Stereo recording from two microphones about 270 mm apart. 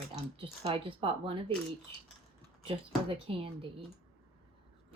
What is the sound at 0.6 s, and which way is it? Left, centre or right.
Speech, centre.